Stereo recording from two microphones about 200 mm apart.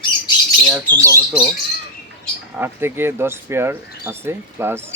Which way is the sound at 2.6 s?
10° right (ahead or behind).